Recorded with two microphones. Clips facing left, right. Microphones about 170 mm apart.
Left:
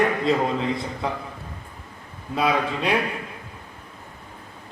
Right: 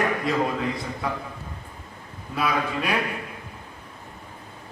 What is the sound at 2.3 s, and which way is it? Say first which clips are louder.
Speech: left 3 dB; 25° left (ahead or behind).